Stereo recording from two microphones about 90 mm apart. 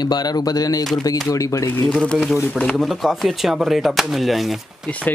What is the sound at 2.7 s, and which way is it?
Speech, centre (ahead or behind).